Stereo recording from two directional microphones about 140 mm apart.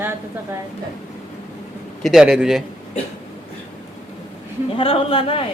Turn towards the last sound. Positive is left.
turn(degrees=40)  # may be behind; listen again after turning